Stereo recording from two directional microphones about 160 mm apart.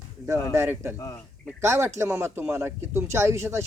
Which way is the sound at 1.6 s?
15° right (ahead or behind).